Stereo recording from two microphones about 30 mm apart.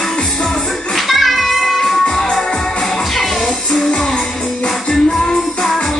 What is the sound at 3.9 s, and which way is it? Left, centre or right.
Music, centre.